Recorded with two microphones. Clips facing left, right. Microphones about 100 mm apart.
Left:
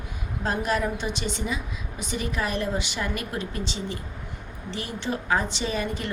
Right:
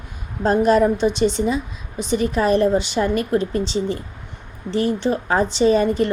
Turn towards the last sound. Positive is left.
turn(degrees=-35)  # may be behind; listen again after turning